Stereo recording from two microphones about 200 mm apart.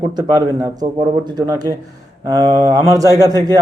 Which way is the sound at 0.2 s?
15° right (ahead or behind).